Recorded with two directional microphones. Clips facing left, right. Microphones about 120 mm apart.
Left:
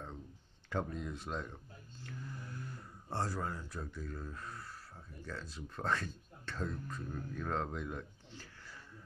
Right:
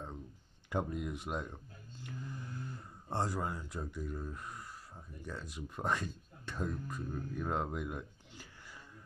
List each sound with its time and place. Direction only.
0.7 s speech: 15° right (ahead or behind)
3.1 s speech: 20° right (ahead or behind)